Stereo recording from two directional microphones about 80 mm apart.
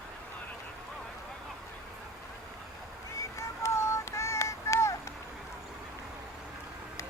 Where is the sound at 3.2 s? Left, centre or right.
Left.